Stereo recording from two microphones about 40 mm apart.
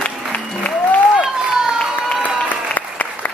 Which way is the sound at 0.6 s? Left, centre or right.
Left.